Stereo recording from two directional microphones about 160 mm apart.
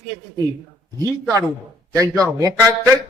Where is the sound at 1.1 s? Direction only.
20° right (ahead or behind).